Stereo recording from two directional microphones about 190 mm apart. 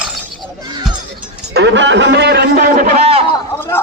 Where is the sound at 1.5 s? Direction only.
70° right (ahead or behind); by 2.9 s 50° right (ahead or behind).